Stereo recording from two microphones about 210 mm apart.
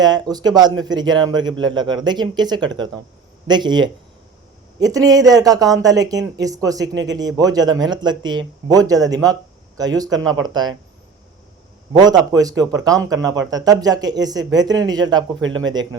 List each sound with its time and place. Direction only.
0.0 s a man's voice: 20° right (ahead or behind)
12.0 s speech: 20° right (ahead or behind)
15.4 s speech: 70° right (ahead or behind)
15.6 s a man's voice: 20° right (ahead or behind)